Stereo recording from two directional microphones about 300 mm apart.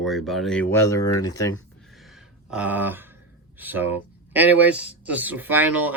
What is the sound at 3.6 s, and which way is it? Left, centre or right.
Speech, centre.